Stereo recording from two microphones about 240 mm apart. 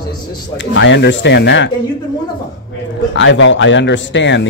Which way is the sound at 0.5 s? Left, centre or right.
Left.